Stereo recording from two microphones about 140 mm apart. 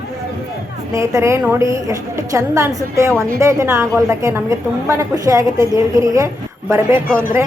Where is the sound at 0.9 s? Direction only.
20° right (ahead or behind).